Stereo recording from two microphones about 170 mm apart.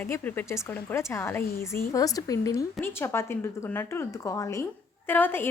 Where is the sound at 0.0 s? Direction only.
10° left (ahead or behind).